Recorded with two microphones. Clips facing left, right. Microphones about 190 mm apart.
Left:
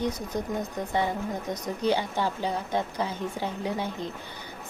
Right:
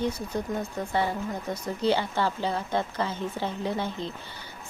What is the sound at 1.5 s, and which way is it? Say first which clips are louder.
A woman's voice: right 1 dB; 15° left (ahead or behind).